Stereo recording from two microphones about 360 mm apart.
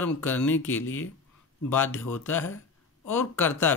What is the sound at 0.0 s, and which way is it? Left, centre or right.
Speech, centre.